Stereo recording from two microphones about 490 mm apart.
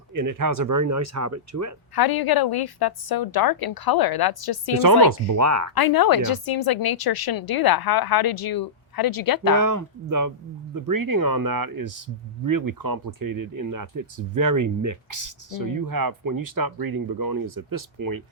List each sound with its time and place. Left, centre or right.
0.1 s speech: right
2.0 s a woman's voice: left
5.3 s speech: right
5.7 s a woman's voice: left
9.6 s speech: right